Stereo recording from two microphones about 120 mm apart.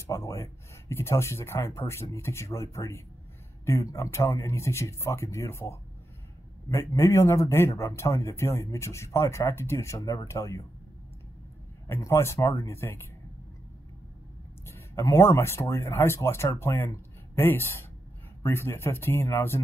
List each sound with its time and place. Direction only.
0.0 s a man's voice: 25° left (ahead or behind)
11.9 s a man's voice: 20° left (ahead or behind)
14.7 s a man's voice: 20° left (ahead or behind)